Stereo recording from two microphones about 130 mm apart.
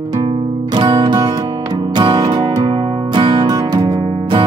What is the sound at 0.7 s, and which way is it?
Music, 30° right (ahead or behind).